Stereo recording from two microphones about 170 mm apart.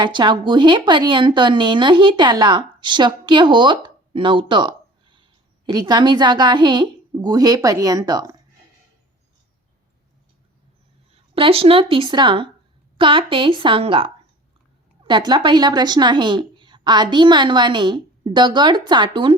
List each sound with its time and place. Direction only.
0.0 s a woman's voice: 25° right (ahead or behind)
11.1 s a woman's voice: 35° right (ahead or behind)